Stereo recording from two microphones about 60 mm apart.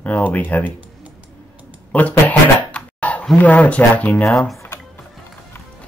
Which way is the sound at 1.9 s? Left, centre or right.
Left.